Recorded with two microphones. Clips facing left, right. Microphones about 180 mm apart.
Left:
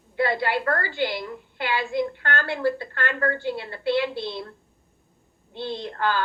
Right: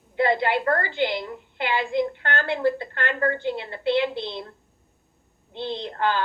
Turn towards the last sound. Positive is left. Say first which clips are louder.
# right 1 dB
turn(degrees=-20)  # may be behind; listen again after turning